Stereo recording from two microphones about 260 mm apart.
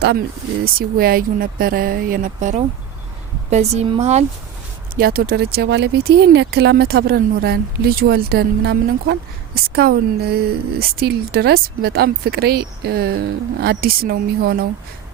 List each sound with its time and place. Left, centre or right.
0.6 s a woman's voice: right
4.9 s a woman's voice: right